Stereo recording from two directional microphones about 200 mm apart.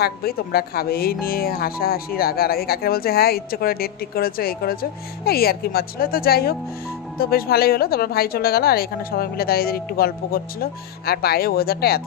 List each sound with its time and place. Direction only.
0.0 s a woman's voice: 50° left (ahead or behind)